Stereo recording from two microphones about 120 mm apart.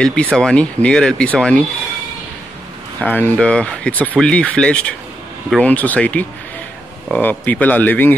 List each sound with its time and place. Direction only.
0.0 s speech: 10° left (ahead or behind)
3.0 s speech: 15° left (ahead or behind)